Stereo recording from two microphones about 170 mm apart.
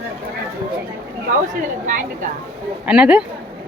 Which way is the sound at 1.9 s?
50° right (ahead or behind).